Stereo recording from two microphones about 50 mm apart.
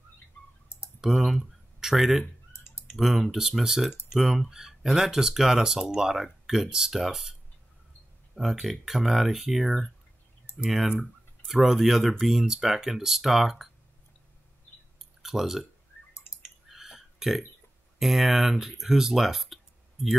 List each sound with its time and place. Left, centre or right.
0.7 s clicking: left
1.0 s typing: centre
2.9 s speech: centre
8.4 s speech: centre
15.0 s a sound: centre
17.9 s speech: centre